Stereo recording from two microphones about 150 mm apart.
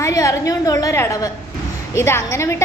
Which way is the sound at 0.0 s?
20° left (ahead or behind).